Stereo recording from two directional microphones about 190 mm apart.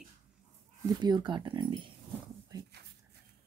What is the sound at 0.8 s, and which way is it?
Speech, 25° right (ahead or behind).